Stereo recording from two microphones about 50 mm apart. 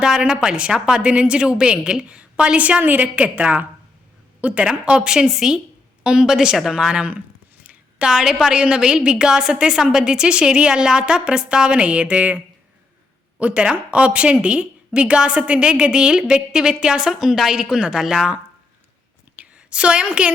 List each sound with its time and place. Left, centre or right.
0.0 s a woman's voice: centre; by 3.7 s right
4.4 s a sound: right
4.6 s a woman's voice: centre
6.9 s a woman's voice: right
7.6 s a sound: right
8.0 s a woman's voice: centre; by 12.4 s right
13.4 s a woman's voice: right; by 17.6 s centre
17.6 s a woman's voice: centre
18.0 s speech: centre
19.4 s a sound: right